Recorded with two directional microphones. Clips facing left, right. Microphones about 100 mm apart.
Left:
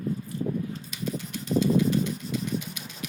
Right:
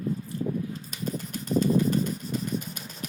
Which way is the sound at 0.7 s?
45° right (ahead or behind).